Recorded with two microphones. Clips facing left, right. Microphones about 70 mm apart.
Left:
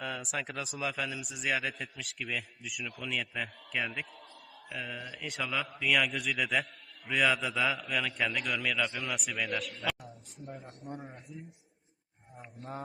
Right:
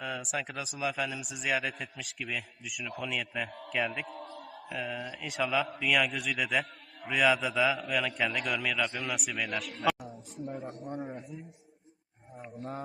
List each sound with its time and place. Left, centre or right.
0.0 s a man's voice: centre
4.0 s a man's voice: right
4.7 s a man's voice: centre
12.4 s a man's voice: centre